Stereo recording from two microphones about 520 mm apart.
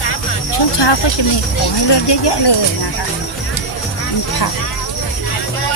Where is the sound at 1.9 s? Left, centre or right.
Left.